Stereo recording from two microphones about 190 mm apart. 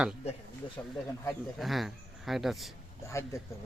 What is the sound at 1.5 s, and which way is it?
Speech, centre (ahead or behind).